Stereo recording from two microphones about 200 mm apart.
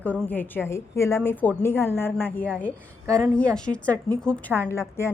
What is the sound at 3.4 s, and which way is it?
A woman's voice, 5° left (ahead or behind).